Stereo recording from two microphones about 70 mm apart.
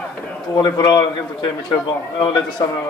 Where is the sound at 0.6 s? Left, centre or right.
Left.